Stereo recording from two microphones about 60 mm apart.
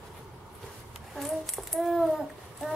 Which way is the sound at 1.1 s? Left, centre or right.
Centre.